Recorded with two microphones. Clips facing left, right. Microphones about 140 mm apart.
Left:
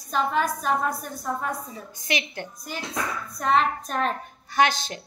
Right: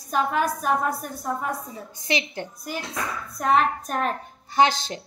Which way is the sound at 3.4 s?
10° right (ahead or behind).